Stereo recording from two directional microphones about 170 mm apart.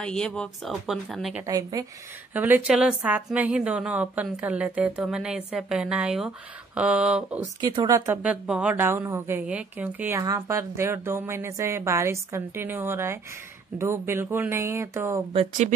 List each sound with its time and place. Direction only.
0.0 s speech: 5° left (ahead or behind)
1.4 s a woman's voice: 20° right (ahead or behind)
7.6 s a woman's voice: 25° right (ahead or behind)